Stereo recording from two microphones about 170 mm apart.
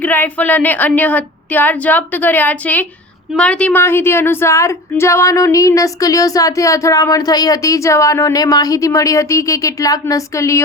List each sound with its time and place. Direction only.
0.0 s a woman's voice: 10° left (ahead or behind)